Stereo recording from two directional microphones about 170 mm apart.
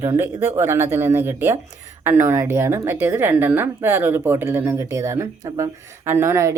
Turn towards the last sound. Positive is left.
turn(degrees=-15)  # may be behind; listen again after turning